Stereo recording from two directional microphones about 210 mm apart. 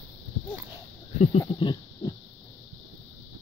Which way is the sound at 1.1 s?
35° left (ahead or behind).